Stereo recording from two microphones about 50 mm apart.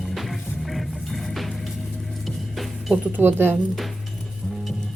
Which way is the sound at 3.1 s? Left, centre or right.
Right.